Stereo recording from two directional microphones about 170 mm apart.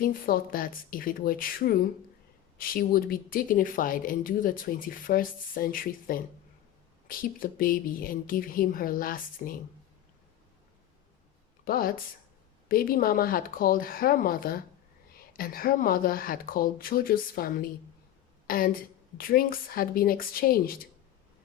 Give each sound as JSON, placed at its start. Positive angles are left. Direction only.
{"t": 0.0, "sound": "speech", "side_deg": 60}
{"t": 11.6, "sound": "a woman's voice", "side_deg": 60}